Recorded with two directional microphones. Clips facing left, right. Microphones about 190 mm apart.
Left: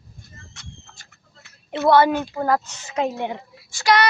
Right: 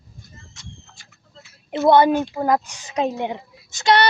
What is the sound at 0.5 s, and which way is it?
Pigeon, 60° left (ahead or behind).